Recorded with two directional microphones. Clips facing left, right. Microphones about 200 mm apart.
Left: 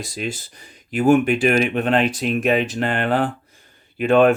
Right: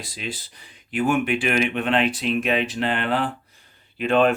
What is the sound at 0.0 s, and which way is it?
Speech, 45° left (ahead or behind).